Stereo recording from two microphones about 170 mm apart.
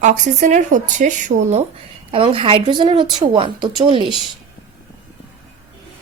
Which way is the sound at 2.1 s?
30° right (ahead or behind).